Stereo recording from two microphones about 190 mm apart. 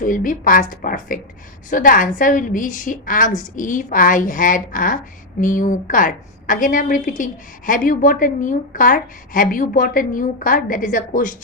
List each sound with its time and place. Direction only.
0.0 s a woman's voice: 45° left (ahead or behind)